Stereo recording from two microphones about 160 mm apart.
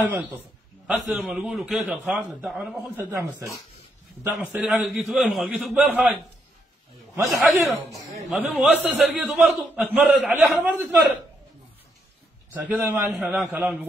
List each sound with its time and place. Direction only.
0.1 s a man's voice: 10° right (ahead or behind)
3.0 s a man's voice: 15° right (ahead or behind)
7.4 s a man's voice: centre (ahead or behind)
12.6 s a man's voice: 10° right (ahead or behind)